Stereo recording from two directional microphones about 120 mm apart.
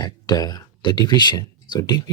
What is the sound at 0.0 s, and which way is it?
Speech, 35° left (ahead or behind).